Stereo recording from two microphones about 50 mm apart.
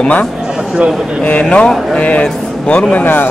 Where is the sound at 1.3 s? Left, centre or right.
Left.